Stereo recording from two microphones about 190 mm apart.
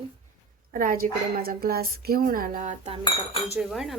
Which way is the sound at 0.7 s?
50° right (ahead or behind).